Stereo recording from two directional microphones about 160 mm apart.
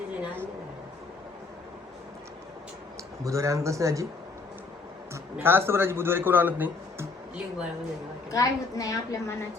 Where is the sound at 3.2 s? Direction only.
20° right (ahead or behind).